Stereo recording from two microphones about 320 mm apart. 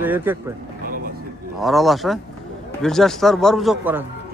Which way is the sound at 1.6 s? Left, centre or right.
Centre.